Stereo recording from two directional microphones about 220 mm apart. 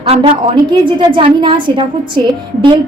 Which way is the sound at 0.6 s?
20° right (ahead or behind).